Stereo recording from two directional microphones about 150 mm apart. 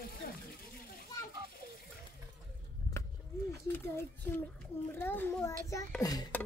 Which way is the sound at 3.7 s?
15° left (ahead or behind).